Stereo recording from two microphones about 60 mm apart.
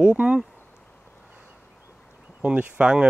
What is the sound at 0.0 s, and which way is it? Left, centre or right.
Speech, right.